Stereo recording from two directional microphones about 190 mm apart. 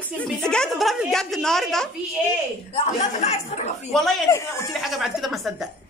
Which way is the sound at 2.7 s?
35° left (ahead or behind).